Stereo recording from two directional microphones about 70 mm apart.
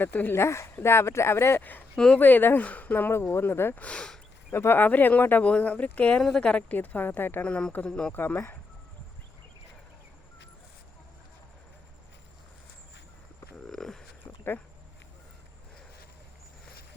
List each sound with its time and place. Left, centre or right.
0.0 s speech: left
0.4 s speech: left
2.1 s speech: left
3.8 s speech: centre
4.5 s speech: left
6.2 s speech: centre; by 7.4 s left
7.4 s speech: centre
8.1 s speech: left
13.6 s a sound: centre